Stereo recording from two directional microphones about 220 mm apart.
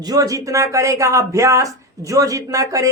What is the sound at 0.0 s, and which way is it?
Speech, 15° right (ahead or behind).